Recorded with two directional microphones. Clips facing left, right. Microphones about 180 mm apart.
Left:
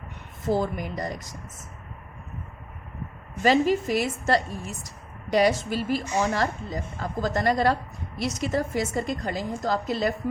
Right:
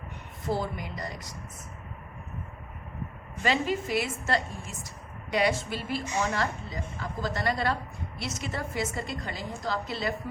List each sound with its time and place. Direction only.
0.4 s a woman's voice: 45° left (ahead or behind)
3.4 s a woman's voice: 40° left (ahead or behind)